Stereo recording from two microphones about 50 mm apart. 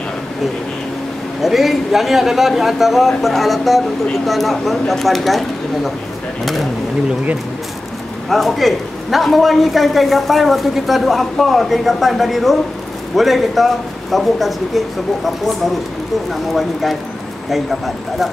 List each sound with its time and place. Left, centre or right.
1.4 s a man's voice: centre
6.4 s speech: centre
8.3 s a man's voice: centre
17.5 s a man's voice: centre